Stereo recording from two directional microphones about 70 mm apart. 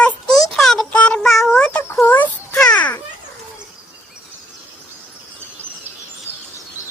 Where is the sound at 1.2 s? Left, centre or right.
Centre.